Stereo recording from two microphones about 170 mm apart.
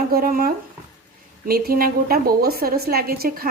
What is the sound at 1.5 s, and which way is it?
Speech, 60° right (ahead or behind).